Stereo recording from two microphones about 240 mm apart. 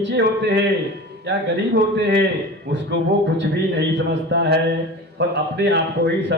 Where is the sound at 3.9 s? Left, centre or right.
Right.